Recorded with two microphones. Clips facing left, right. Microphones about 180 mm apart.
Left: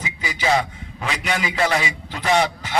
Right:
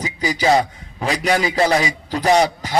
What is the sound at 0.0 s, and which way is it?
A man's voice, 35° right (ahead or behind).